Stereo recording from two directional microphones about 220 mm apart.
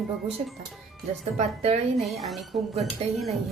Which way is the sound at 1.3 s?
30° right (ahead or behind).